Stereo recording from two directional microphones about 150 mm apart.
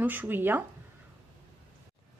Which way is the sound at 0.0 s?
10° right (ahead or behind).